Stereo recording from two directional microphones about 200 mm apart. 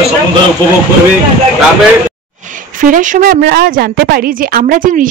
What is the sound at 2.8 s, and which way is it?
A woman's voice, 40° right (ahead or behind).